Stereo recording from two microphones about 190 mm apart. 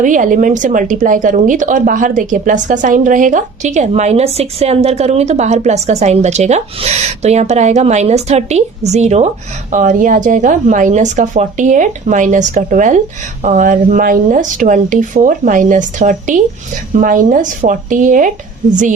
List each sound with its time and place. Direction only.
0.0 s a woman's voice: 45° right (ahead or behind)